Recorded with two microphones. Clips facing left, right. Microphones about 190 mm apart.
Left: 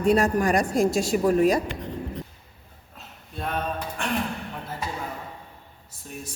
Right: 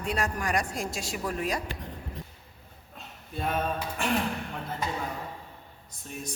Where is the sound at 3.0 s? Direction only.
Centre (ahead or behind).